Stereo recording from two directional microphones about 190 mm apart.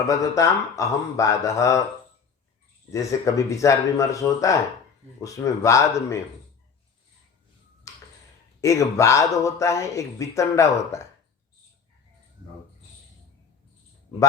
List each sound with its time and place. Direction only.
0.1 s speech: 15° left (ahead or behind)
2.9 s speech: 15° left (ahead or behind)
7.9 s a sound: 15° left (ahead or behind)
8.6 s speech: 15° left (ahead or behind)